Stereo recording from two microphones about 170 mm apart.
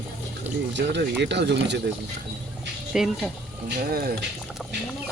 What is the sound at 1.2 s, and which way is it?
Speech, 90° right.